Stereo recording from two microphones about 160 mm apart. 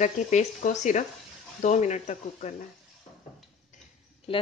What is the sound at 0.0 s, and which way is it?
Speech, 50° left (ahead or behind).